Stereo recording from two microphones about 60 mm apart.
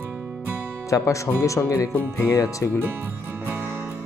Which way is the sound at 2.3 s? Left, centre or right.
Left.